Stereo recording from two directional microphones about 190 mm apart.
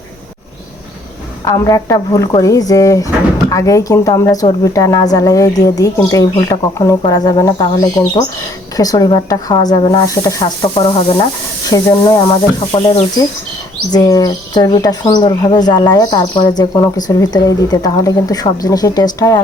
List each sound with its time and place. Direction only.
1.5 s speech: 15° left (ahead or behind)